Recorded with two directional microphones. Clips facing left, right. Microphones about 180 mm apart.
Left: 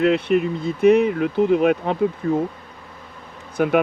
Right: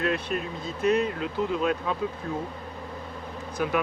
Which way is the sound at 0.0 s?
65° left (ahead or behind).